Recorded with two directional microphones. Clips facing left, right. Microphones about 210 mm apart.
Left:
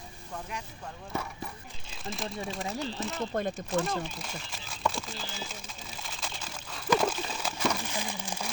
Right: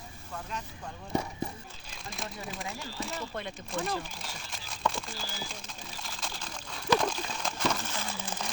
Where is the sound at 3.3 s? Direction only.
45° left (ahead or behind).